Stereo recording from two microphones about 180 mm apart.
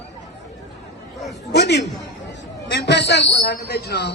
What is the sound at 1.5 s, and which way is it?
A man's voice, 65° left (ahead or behind).